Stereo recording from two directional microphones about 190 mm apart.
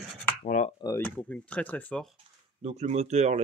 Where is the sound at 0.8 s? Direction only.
10° left (ahead or behind).